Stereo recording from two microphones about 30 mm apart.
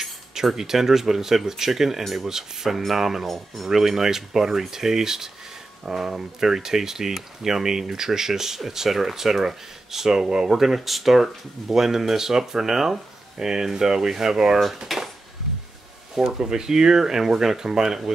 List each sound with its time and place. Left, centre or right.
0.0 s speech: centre
10.5 s speech: centre
14.9 s dishes: centre
16.3 s speech: right